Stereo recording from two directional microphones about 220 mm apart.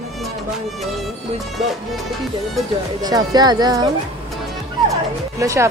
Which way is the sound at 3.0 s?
15° right (ahead or behind).